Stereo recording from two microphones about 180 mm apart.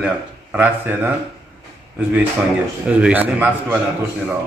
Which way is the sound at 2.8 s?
10° right (ahead or behind).